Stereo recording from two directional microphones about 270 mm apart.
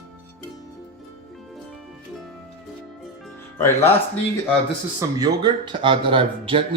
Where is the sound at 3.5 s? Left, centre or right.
Centre.